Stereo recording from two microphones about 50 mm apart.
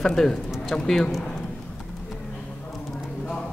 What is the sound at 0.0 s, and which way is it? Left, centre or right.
A woman's voice, centre.